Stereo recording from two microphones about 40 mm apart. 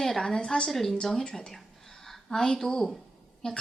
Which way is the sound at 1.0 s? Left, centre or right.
Centre.